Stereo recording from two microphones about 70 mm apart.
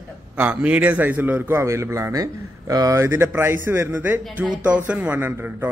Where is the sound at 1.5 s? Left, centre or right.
Right.